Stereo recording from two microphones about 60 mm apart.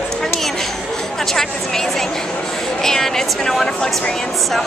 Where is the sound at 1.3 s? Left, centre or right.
Centre.